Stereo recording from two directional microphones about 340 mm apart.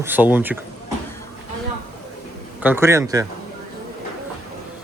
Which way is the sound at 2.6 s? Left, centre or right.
Centre.